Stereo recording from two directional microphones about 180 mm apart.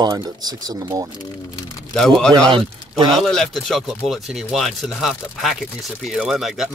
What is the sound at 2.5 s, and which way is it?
Speech, 25° right (ahead or behind).